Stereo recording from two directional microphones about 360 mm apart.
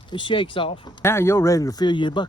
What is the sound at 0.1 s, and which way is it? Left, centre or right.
Speech, centre.